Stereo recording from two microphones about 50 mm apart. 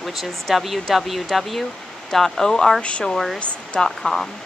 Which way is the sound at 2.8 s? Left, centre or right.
Left.